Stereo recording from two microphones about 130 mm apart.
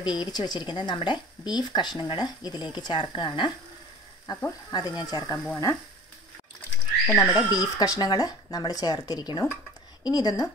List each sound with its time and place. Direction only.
0.0 s speech: 35° left (ahead or behind)
7.1 s speech: 25° left (ahead or behind)